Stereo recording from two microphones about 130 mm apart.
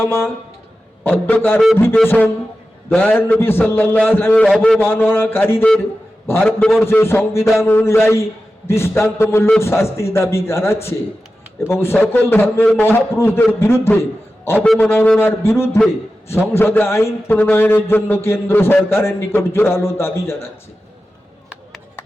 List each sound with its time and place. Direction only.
0.0 s a man's voice: 20° left (ahead or behind)
4.4 s a man's voice: centre (ahead or behind)
4.8 s a man's voice: 15° left (ahead or behind)
6.4 s a man's voice: centre (ahead or behind)
6.8 s a man's voice: 20° left (ahead or behind)
15.2 s a man's voice: 15° left (ahead or behind)